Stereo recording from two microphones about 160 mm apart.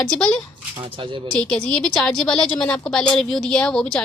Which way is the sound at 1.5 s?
5° left (ahead or behind).